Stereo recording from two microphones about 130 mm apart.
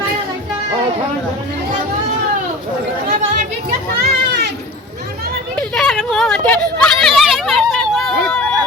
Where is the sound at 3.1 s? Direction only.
90° right.